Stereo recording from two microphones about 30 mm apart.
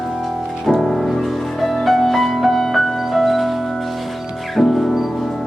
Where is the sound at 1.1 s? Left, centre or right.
Centre.